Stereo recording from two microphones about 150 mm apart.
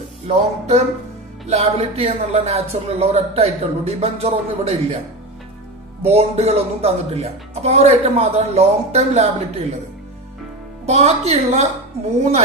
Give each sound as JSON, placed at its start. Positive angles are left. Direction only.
{"t": 0.3, "sound": "speech", "side_deg": -50}
{"t": 6.0, "sound": "speech", "side_deg": -45}
{"t": 10.9, "sound": "speech", "side_deg": -45}